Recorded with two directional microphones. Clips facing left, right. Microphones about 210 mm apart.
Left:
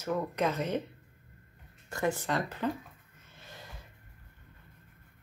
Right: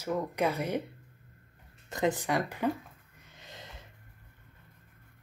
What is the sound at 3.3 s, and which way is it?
Snort, 20° right (ahead or behind).